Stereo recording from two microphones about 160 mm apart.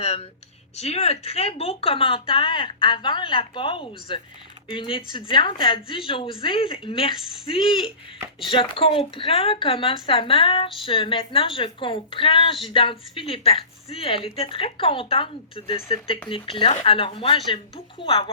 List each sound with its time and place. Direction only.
0.0 s speech: 40° left (ahead or behind)